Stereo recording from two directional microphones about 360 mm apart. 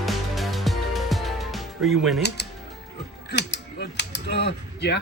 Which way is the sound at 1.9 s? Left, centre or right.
Centre.